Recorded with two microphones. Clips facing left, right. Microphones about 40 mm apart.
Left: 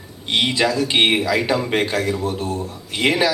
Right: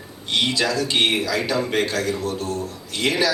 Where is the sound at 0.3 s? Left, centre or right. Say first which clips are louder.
Left 3 dB; left.